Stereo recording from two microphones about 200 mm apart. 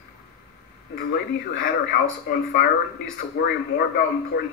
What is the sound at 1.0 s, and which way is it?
A man's voice, 45° left (ahead or behind).